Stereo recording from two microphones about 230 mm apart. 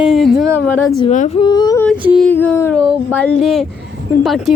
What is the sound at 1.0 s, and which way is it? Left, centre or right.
Speech, left.